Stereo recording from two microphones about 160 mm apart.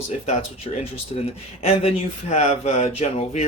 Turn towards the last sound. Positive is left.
turn(degrees=40)  # may be behind; listen again after turning